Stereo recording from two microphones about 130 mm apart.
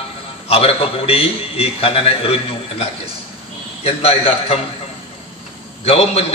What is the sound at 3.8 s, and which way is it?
Speech, 50° left (ahead or behind).